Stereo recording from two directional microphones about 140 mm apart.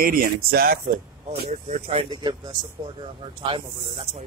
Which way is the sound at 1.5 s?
50° right (ahead or behind).